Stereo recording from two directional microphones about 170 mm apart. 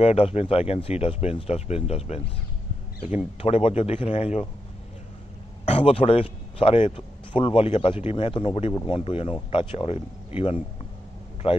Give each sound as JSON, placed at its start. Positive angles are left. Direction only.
{"t": 0.0, "sound": "speech", "side_deg": 35}
{"t": 3.3, "sound": "speech", "side_deg": 35}
{"t": 5.7, "sound": "speech", "side_deg": 35}